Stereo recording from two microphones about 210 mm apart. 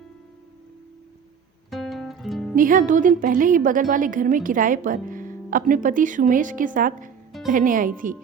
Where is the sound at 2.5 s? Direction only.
40° right (ahead or behind).